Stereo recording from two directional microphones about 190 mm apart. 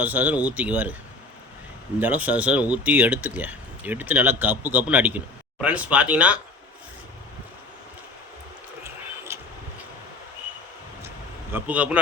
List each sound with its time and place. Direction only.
0.0 s speech: 10° right (ahead or behind)
2.0 s speech: 10° right (ahead or behind)
8.8 s a sound: 15° right (ahead or behind)
11.5 s speech: 10° right (ahead or behind)